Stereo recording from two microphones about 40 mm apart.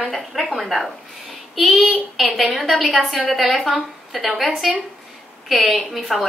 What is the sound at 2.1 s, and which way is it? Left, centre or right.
A woman's voice, centre.